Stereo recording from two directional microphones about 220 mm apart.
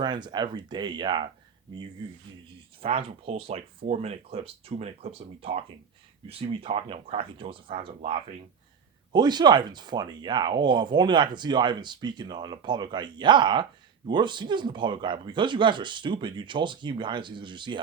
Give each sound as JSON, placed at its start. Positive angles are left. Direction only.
{"t": 0.0, "sound": "speech", "side_deg": -20}
{"t": 2.8, "sound": "speech", "side_deg": -25}